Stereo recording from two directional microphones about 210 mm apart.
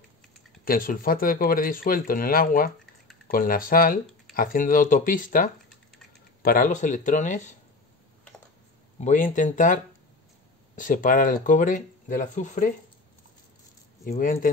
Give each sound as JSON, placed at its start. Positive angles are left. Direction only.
{"t": 0.7, "sound": "speech", "side_deg": 40}
{"t": 9.0, "sound": "speech", "side_deg": 35}
{"t": 10.8, "sound": "speech", "side_deg": 40}
{"t": 14.0, "sound": "speech", "side_deg": 40}